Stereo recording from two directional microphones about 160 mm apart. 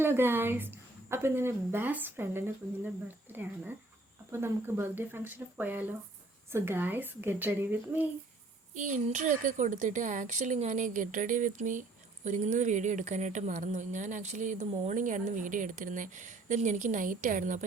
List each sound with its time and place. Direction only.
0.0 s a woman's voice: 15° right (ahead or behind)
4.3 s a woman's voice: 15° right (ahead or behind)
8.7 s speech: 50° right (ahead or behind)